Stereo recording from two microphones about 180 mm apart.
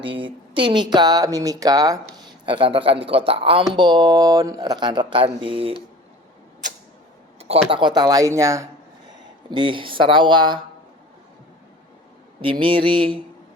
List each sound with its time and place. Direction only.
0.0 s speech: 30° right (ahead or behind)
7.3 s a sound: 35° right (ahead or behind)
7.7 s speech: 25° right (ahead or behind)
9.5 s speech: 25° right (ahead or behind)
12.4 s speech: 30° right (ahead or behind)